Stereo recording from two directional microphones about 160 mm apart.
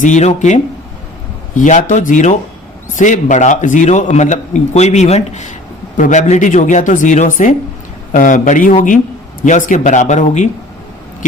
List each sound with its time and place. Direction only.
0.0 s a man's voice: 50° left (ahead or behind)